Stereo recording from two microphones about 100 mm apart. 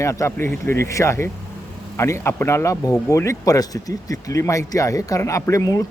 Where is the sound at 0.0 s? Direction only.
30° left (ahead or behind).